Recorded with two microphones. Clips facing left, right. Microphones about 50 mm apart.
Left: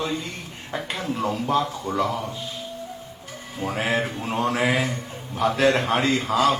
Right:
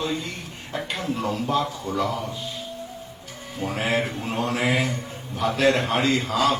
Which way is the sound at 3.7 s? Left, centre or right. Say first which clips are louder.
Even; left.